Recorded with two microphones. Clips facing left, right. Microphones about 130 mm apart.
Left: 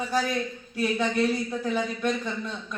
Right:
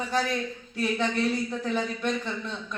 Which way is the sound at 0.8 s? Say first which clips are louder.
Left 2 dB; 10° left (ahead or behind).